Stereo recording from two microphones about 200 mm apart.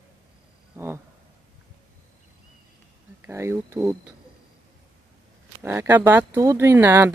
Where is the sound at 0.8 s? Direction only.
15° right (ahead or behind).